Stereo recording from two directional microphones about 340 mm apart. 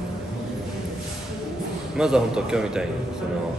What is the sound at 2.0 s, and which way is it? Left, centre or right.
Speech, centre.